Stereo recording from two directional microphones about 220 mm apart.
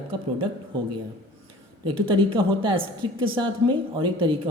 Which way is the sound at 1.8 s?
25° right (ahead or behind).